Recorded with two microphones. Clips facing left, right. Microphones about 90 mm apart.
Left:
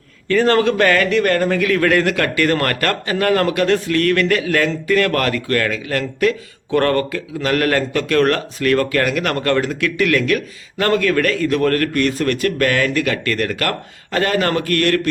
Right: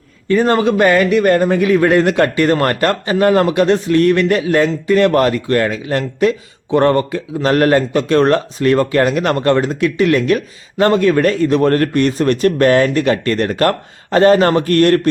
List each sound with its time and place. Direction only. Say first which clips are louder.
0.3 s a man's voice: right 2 dB; 15° right (ahead or behind)